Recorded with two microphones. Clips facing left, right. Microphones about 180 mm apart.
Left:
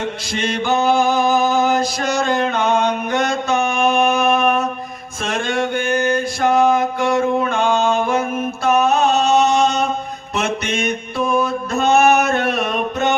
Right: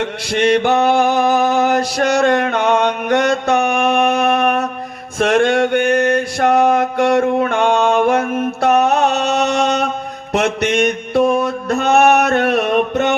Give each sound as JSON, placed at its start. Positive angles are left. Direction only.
{"t": 0.3, "sound": "mantra", "side_deg": -70}
{"t": 8.6, "sound": "music", "side_deg": -70}